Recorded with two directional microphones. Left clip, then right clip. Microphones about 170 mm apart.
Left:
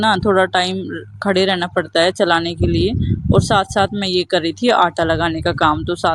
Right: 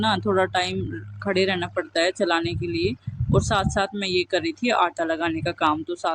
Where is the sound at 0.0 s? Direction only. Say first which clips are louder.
Left 7 dB; 40° left (ahead or behind).